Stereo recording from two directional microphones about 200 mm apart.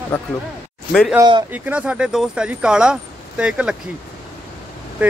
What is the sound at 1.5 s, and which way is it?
Speech, 5° right (ahead or behind).